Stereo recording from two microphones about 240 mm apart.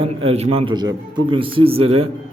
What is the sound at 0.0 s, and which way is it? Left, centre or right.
Speech, right.